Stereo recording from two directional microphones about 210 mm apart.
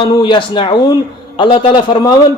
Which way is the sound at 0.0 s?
20° left (ahead or behind).